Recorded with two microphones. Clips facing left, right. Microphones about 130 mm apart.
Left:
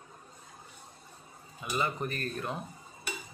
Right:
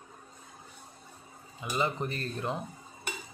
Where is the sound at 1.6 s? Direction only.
20° right (ahead or behind).